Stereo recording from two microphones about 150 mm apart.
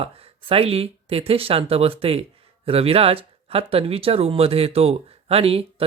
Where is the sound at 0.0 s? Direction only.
40° right (ahead or behind).